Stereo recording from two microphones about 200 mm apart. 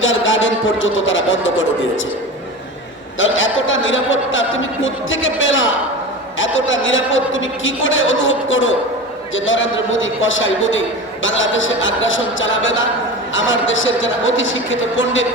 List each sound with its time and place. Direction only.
0.0 s a man's voice: 75° left (ahead or behind)
3.2 s a man's voice: 75° left (ahead or behind)